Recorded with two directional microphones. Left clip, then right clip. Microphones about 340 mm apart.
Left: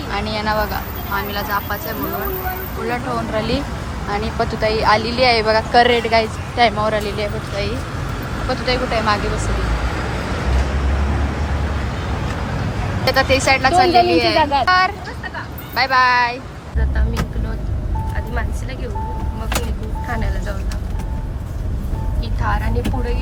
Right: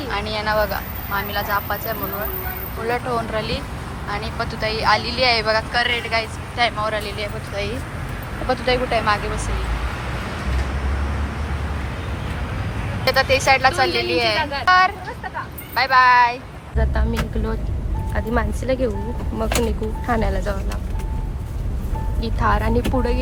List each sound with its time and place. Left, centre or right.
0.1 s speech: centre
13.1 s speech: centre
18.1 s speech: centre
20.1 s speech: centre
22.2 s speech: centre